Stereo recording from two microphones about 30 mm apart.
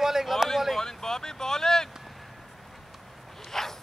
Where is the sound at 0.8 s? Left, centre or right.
Centre.